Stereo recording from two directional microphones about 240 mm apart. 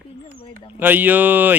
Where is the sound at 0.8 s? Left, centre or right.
Centre.